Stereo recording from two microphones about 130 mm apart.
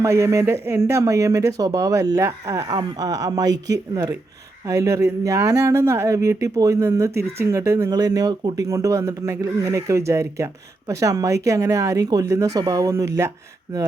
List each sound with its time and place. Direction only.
0.0 s speech: 20° right (ahead or behind)